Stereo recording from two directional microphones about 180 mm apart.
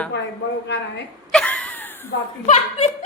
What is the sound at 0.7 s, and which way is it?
Speech, 75° left (ahead or behind).